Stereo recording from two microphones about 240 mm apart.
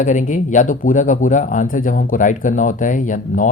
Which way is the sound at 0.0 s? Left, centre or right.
Left.